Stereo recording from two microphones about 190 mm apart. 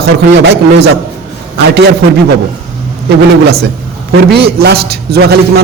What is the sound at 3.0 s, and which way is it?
A man's voice, 55° right (ahead or behind).